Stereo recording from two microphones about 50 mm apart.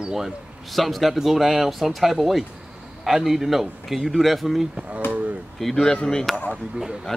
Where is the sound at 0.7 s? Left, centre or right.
Centre.